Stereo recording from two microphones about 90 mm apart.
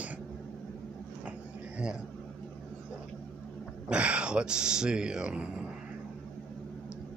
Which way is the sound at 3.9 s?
10° right (ahead or behind).